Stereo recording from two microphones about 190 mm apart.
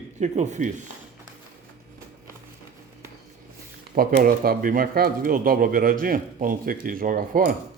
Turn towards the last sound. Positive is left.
turn(degrees=-50)  # may be behind; listen again after turning